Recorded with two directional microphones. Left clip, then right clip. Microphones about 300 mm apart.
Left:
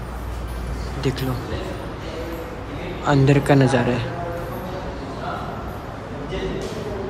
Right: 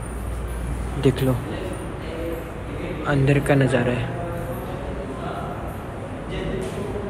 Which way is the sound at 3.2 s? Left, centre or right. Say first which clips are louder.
Left 2 dB; centre.